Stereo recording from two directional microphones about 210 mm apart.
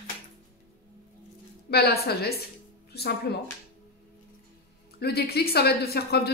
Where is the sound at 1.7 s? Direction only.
50° left (ahead or behind).